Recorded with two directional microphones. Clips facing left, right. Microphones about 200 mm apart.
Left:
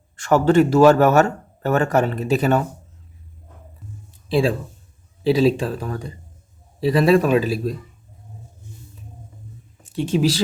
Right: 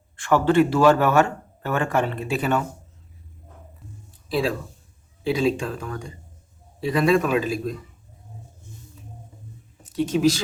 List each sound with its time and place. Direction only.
0.2 s speech: 40° left (ahead or behind)
4.3 s speech: 30° left (ahead or behind)
9.8 s speech: 25° left (ahead or behind)